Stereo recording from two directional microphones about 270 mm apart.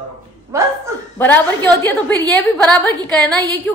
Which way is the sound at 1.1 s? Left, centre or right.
Centre.